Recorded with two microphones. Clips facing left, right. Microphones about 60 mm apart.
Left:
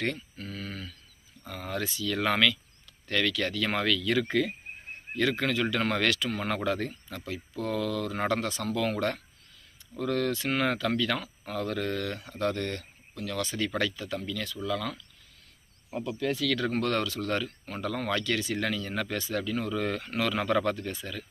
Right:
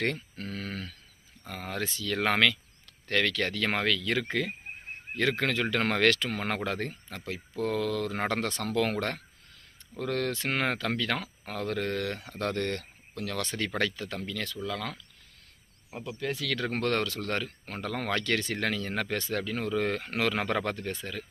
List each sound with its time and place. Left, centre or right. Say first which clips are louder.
0.3 s a sound: right 2 dB; right
1.5 s speech: left 1 dB; right
16.0 s speech: left 4 dB; right